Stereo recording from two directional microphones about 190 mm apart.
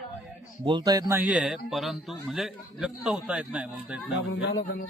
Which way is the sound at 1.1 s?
10° right (ahead or behind).